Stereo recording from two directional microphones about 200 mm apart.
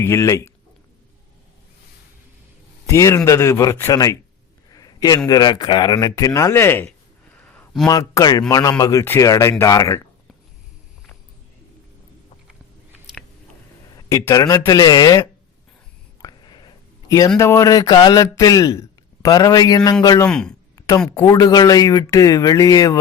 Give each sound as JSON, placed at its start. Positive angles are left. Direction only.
{"t": 0.0, "sound": "speech", "side_deg": 15}
{"t": 2.9, "sound": "a man's voice", "side_deg": 15}
{"t": 7.9, "sound": "a man's voice", "side_deg": 20}
{"t": 13.9, "sound": "speech", "side_deg": 15}
{"t": 20.2, "sound": "speech", "side_deg": 5}
{"t": 20.7, "sound": "a sound", "side_deg": 15}
{"t": 21.2, "sound": "speech", "side_deg": 20}